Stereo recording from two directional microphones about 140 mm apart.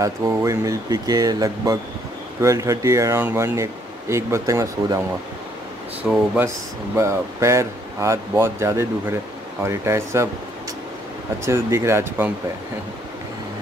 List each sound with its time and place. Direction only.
0.0 s speech: 20° right (ahead or behind)
6.0 s speech: 5° right (ahead or behind)
7.0 s speech: 20° right (ahead or behind)
11.4 s speech: 20° right (ahead or behind)